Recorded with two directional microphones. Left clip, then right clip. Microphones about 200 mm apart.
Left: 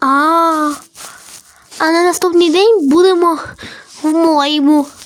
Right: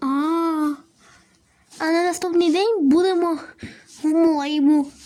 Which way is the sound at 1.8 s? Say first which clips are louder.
Left 9 dB; 5° left (ahead or behind).